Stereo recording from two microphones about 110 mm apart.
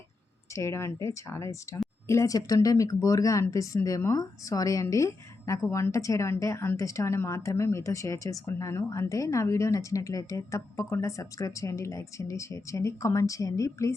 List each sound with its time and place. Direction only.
0.5 s a woman's voice: 25° left (ahead or behind)